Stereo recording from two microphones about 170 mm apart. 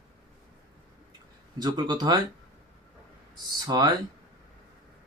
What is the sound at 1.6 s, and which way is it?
Speech, 25° right (ahead or behind).